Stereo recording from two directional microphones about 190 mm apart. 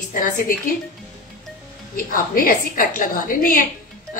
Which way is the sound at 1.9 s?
50° left (ahead or behind).